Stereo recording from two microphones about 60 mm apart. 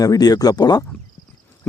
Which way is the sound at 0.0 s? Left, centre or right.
Left.